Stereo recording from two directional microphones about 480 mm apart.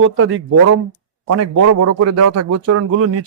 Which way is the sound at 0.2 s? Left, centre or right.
Right.